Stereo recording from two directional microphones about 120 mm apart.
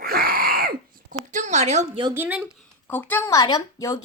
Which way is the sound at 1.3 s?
70° right (ahead or behind).